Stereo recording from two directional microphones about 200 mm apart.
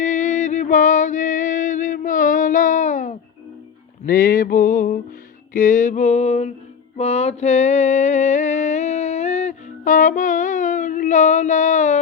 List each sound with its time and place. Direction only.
0.0 s music: 40° left (ahead or behind)
5.5 s a sound: 40° left (ahead or behind)
6.9 s mantra: 35° left (ahead or behind)